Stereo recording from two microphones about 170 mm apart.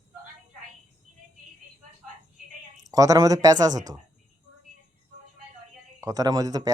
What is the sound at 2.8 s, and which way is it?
Speech, 20° right (ahead or behind).